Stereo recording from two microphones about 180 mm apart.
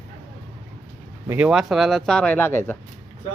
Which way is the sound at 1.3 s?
10° right (ahead or behind).